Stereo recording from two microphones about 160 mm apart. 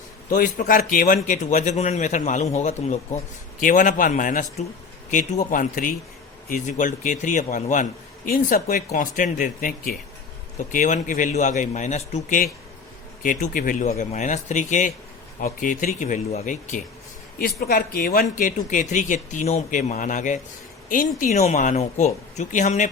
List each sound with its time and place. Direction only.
0.3 s speech: 60° left (ahead or behind)
3.6 s a man's voice: 55° left (ahead or behind)
13.2 s a man's voice: 60° left (ahead or behind)
17.3 s speech: 65° left (ahead or behind); by 22.9 s 50° left (ahead or behind)